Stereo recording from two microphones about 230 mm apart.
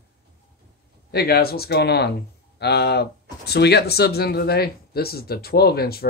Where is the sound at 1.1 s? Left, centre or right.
Left.